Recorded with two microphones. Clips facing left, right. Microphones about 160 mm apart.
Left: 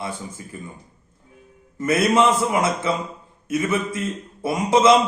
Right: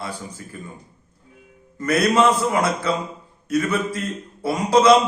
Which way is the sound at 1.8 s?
20° left (ahead or behind).